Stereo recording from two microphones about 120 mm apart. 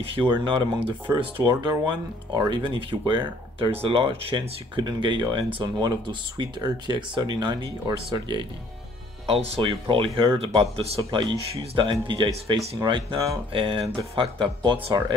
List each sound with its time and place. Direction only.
0.0 s speech: 50° right (ahead or behind)
9.3 s speech: 50° right (ahead or behind)